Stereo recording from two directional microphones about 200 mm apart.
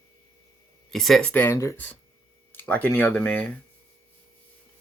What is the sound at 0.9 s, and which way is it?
Speech, centre (ahead or behind).